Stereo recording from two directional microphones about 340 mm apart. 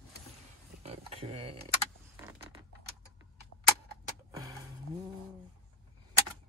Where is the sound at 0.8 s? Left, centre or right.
Centre.